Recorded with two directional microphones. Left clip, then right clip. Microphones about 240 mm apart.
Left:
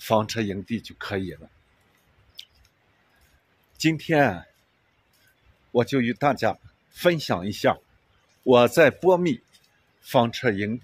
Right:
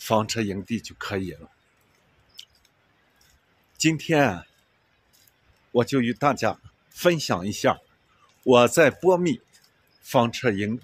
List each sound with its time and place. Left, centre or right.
0.0 s speech: centre
2.4 s mouse: centre
3.7 s speech: centre
5.7 s speech: centre